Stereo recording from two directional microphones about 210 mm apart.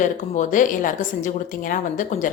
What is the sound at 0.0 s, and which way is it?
A woman's voice, 40° left (ahead or behind).